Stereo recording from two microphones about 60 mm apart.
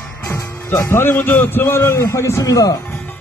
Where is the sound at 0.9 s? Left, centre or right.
Left.